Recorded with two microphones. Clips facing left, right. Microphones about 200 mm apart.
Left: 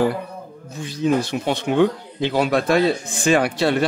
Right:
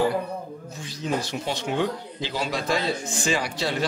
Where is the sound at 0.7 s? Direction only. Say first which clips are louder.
Left 9 dB; 60° left (ahead or behind).